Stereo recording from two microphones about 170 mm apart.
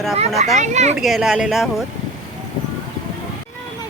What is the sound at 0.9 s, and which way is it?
Speech, centre (ahead or behind).